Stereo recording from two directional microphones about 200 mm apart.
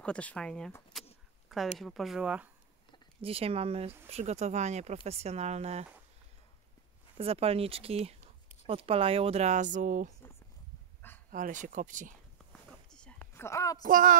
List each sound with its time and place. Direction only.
0.0 s speech: 5° left (ahead or behind)
3.2 s speech: 30° right (ahead or behind)
7.2 s speech: 30° right (ahead or behind)
11.0 s dog: 10° left (ahead or behind)
11.3 s speech: 40° right (ahead or behind)
12.9 s a sound: 5° left (ahead or behind)
13.8 s speech: 40° right (ahead or behind)